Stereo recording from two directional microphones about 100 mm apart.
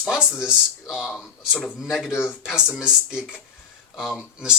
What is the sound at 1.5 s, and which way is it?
Speech, 15° left (ahead or behind).